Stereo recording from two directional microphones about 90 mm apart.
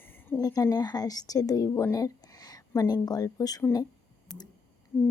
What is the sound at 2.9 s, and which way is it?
Speech, 45° left (ahead or behind).